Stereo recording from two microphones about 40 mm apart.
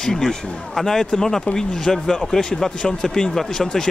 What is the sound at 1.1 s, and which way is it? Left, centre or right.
Speech, centre.